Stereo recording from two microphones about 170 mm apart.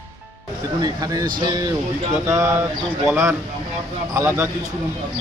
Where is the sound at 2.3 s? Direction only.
20° right (ahead or behind).